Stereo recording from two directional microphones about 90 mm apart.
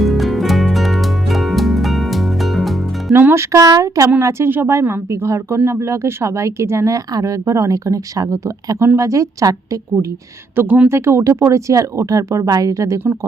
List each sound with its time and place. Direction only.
0.0 s music: centre (ahead or behind)
3.2 s speech: 25° right (ahead or behind)
3.5 s speech: 40° right (ahead or behind)
10.5 s speech: 25° right (ahead or behind); by 13.0 s 40° right (ahead or behind)